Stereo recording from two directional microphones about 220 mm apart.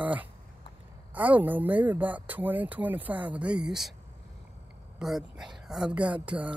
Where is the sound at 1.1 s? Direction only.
5° right (ahead or behind).